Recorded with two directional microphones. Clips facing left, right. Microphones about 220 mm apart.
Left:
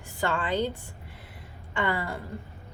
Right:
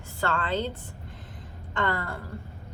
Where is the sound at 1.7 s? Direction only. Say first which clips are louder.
Even; 10° left (ahead or behind).